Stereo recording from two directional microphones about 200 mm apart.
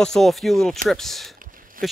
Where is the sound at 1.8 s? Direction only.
45° right (ahead or behind).